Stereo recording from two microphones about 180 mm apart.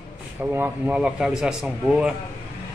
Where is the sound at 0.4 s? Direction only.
10° right (ahead or behind).